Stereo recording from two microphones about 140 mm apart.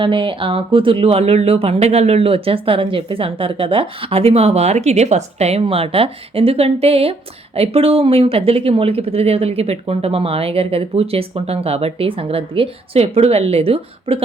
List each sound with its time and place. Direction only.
0.0 s speech: 35° right (ahead or behind)